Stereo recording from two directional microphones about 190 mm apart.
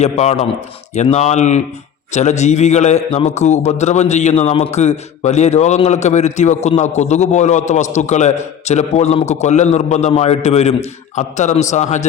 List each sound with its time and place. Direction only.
0.0 s a man's voice: 35° left (ahead or behind)